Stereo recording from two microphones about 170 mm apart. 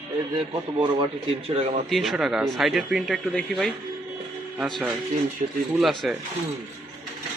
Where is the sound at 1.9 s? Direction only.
Centre (ahead or behind).